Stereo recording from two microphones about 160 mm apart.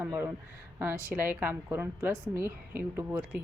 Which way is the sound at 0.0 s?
15° right (ahead or behind).